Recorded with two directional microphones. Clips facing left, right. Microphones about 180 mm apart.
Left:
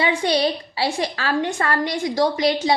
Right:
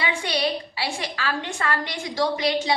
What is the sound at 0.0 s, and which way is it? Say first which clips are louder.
A woman's voice: left 6 dB; 40° left (ahead or behind).